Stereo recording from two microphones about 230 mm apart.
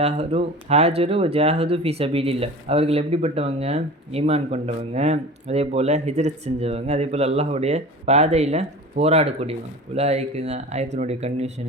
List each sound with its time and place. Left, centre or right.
0.0 s speech: right